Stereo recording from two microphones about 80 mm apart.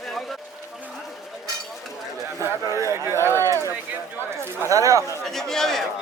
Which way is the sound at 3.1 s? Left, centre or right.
Left.